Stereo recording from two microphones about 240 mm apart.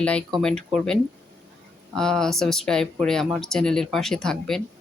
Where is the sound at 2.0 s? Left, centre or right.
Centre.